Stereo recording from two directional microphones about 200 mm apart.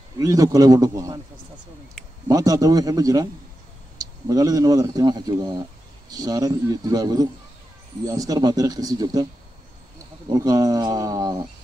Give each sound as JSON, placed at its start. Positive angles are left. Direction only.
{"t": 0.2, "sound": "speech", "side_deg": -15}
{"t": 2.2, "sound": "speech", "side_deg": -15}
{"t": 10.3, "sound": "speech", "side_deg": -20}